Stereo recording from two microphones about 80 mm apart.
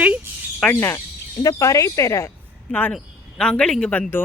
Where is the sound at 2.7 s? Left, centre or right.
Left.